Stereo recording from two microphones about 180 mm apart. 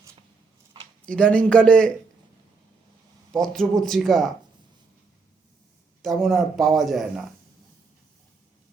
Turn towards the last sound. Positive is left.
turn(degrees=0)  # may be behind; listen again after turning